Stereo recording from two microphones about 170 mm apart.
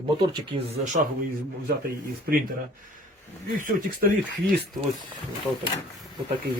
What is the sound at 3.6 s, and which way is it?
Speech, 50° right (ahead or behind).